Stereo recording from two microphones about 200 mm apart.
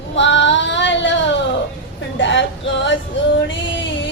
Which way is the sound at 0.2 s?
65° left (ahead or behind).